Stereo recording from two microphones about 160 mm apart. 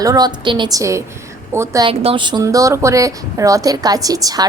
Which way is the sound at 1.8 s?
35° right (ahead or behind).